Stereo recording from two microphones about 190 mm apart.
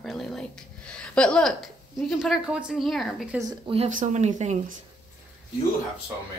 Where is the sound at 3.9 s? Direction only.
40° right (ahead or behind).